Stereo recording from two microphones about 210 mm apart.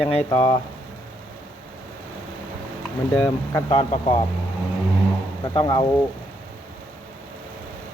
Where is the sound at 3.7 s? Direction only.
30° left (ahead or behind).